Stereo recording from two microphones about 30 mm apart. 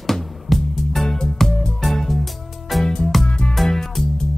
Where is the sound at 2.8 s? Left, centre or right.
Left.